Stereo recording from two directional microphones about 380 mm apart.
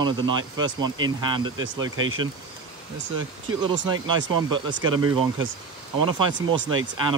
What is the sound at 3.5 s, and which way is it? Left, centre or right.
Speech, right.